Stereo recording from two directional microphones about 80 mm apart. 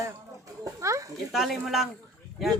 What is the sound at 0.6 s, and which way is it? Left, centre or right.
Speech, right.